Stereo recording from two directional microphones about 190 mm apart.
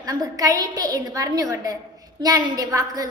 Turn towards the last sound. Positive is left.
turn(degrees=-20)  # may be behind; listen again after turning